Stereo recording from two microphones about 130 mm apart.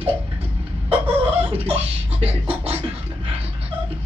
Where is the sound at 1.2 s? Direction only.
50° right (ahead or behind).